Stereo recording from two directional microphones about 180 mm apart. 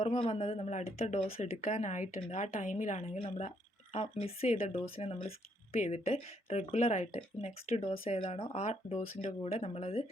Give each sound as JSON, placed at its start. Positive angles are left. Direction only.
{"t": 0.0, "sound": "a woman's voice", "side_deg": 35}